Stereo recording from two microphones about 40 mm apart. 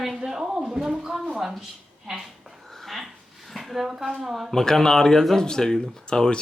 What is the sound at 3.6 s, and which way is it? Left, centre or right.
Speech, centre.